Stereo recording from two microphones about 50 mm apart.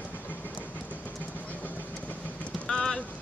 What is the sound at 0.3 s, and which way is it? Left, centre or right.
Train, left.